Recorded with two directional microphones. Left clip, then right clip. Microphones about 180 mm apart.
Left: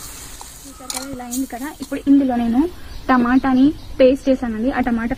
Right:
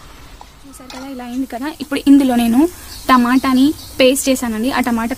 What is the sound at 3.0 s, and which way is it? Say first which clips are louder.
A woman's voice: right 4 dB; 50° right (ahead or behind).